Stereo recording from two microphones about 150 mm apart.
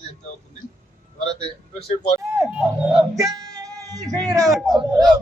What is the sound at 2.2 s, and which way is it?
Speech, 20° right (ahead or behind).